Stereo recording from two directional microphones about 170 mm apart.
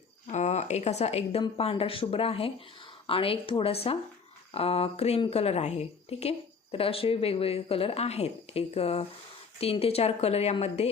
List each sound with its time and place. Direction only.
0.3 s speech: 45° left (ahead or behind)